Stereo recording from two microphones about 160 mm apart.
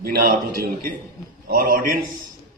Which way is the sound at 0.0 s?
65° right (ahead or behind).